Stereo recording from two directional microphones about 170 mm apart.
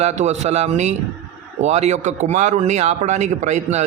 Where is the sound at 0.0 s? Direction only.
40° right (ahead or behind).